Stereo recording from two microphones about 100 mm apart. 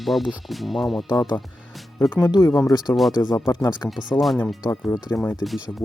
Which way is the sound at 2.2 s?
40° left (ahead or behind).